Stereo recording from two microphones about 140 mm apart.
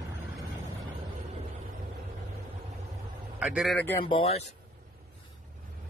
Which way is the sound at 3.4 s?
5° right (ahead or behind).